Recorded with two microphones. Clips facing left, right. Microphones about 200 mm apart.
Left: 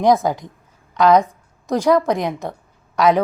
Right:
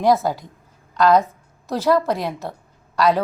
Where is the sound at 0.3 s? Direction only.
20° left (ahead or behind).